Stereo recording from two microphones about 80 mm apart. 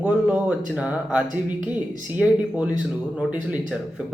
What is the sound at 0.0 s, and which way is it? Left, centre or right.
Speech, centre.